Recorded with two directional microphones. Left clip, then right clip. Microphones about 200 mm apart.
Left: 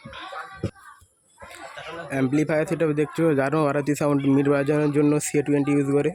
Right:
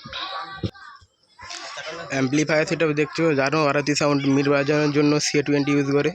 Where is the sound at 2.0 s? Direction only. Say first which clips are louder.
Right 1 dB; 20° left (ahead or behind).